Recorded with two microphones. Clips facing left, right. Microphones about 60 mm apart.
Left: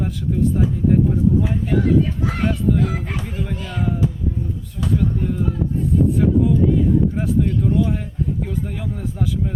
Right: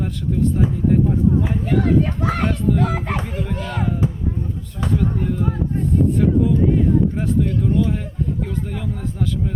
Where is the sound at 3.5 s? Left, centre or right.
Right.